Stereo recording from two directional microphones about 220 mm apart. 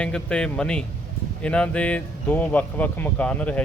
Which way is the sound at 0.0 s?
5° left (ahead or behind).